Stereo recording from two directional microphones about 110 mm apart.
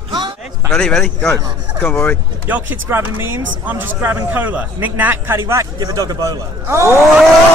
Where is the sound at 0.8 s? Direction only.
5° left (ahead or behind).